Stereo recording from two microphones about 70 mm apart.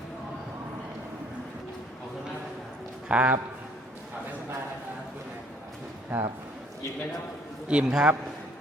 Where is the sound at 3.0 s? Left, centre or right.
Centre.